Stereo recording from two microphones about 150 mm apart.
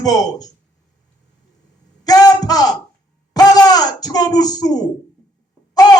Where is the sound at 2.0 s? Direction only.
25° left (ahead or behind).